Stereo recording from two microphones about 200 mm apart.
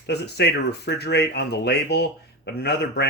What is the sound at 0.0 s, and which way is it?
Speech, 55° left (ahead or behind).